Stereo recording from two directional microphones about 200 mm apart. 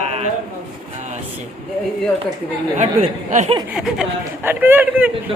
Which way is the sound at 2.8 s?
35° right (ahead or behind).